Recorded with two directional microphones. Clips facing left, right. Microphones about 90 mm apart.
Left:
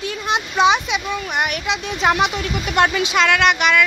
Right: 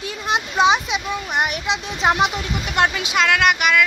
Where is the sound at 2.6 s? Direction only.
15° right (ahead or behind).